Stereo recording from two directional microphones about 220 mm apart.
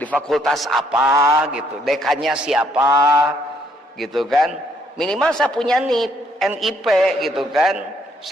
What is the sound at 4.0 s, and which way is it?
A man's voice, centre (ahead or behind).